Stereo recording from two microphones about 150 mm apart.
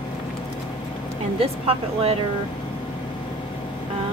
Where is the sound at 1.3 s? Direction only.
40° right (ahead or behind).